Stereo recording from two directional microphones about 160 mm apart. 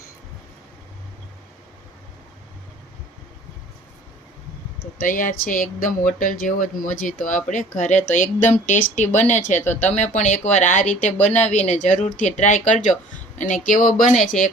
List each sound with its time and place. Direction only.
4.8 s speech: 60° left (ahead or behind)